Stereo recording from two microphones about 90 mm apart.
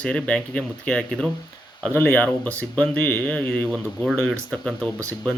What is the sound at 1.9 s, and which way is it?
Speech, 20° left (ahead or behind).